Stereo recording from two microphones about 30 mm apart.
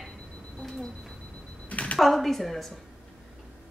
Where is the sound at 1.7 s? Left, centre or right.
Left.